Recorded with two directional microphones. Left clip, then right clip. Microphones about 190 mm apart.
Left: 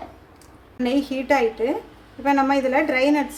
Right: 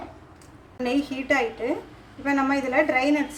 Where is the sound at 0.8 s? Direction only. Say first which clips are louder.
Left 3 dB; 50° left (ahead or behind).